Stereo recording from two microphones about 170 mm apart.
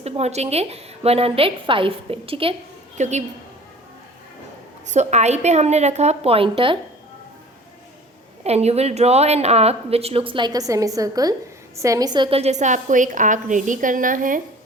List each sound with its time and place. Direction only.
0.0 s a woman's voice: 40° right (ahead or behind)
3.0 s a woman's voice: 45° right (ahead or behind)
4.9 s a woman's voice: 40° right (ahead or behind)
8.4 s a woman's voice: 40° right (ahead or behind)